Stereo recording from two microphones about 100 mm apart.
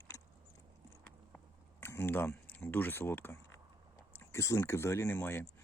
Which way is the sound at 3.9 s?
30° left (ahead or behind).